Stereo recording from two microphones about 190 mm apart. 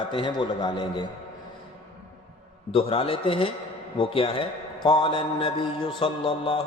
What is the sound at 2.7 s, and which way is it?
A man's voice, 30° left (ahead or behind).